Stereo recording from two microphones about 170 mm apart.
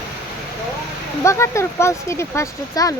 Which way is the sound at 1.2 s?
15° left (ahead or behind).